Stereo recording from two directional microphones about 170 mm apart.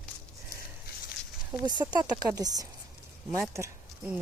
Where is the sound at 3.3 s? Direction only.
Centre (ahead or behind).